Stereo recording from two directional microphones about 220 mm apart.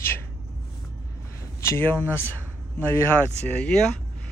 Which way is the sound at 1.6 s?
10° left (ahead or behind).